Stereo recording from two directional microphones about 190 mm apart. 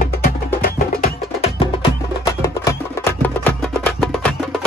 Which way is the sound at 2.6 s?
10° left (ahead or behind).